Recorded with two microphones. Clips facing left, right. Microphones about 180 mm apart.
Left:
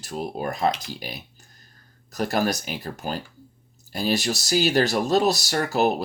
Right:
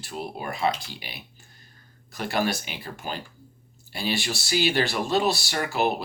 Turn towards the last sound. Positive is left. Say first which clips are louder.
# left 4 dB
turn(degrees=40)  # may be behind; listen again after turning